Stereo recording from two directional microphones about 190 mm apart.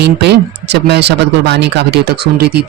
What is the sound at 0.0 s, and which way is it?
Speech, 60° right (ahead or behind).